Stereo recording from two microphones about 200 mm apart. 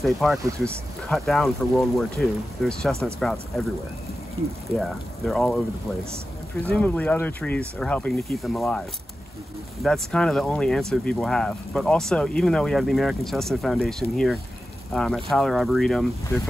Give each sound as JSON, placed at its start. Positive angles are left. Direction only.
{"t": 0.0, "sound": "speech", "side_deg": 0}
{"t": 4.6, "sound": "speech", "side_deg": 0}
{"t": 6.7, "sound": "speech", "side_deg": 5}
{"t": 9.8, "sound": "speech", "side_deg": 5}